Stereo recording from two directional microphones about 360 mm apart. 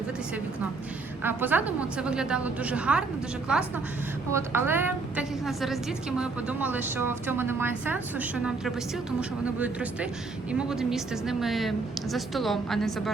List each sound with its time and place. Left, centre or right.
1.2 s a woman's voice: centre
4.3 s a woman's voice: centre